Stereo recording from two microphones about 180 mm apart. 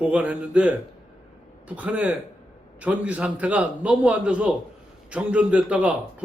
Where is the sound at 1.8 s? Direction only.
5° right (ahead or behind).